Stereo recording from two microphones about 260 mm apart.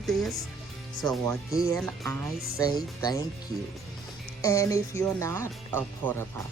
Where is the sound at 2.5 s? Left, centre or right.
Centre.